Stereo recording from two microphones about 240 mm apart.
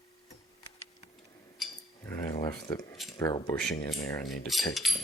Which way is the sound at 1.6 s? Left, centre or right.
Centre.